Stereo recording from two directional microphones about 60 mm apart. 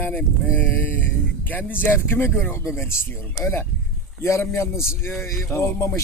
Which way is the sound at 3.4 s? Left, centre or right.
Left.